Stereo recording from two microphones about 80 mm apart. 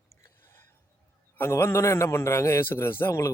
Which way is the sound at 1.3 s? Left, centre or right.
Left.